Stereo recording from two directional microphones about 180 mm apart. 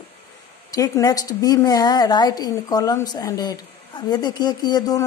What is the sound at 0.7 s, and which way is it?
Speech, 20° left (ahead or behind).